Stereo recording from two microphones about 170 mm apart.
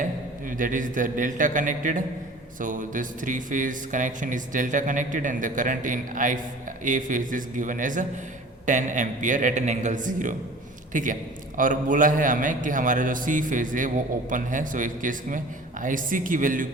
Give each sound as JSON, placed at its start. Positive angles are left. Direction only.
{"t": 0.0, "sound": "a man's voice", "side_deg": -50}